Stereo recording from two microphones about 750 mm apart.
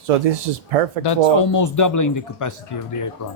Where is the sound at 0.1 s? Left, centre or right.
Right.